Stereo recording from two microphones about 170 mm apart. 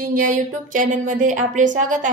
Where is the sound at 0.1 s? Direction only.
50° right (ahead or behind).